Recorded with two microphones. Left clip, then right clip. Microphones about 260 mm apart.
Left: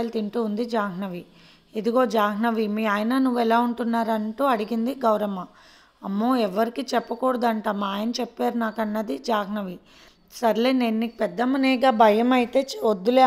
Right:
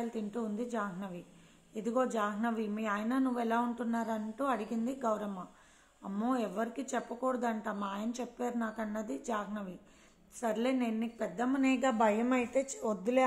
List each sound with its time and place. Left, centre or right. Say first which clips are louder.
0.0 s speech: left 12 dB; left